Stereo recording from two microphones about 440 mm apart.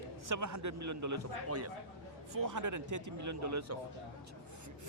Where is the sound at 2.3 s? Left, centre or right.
Right.